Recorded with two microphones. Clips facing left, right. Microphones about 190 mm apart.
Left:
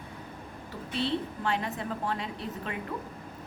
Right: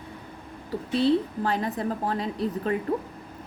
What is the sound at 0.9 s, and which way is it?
A woman's voice, 40° right (ahead or behind).